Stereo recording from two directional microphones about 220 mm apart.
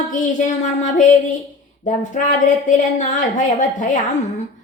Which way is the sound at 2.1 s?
35° left (ahead or behind).